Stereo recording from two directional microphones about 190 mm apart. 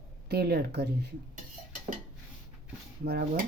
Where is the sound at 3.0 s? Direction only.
55° right (ahead or behind).